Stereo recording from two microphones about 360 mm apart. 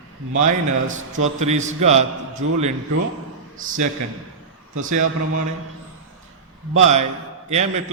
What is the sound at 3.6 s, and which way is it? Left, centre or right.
Speech, right.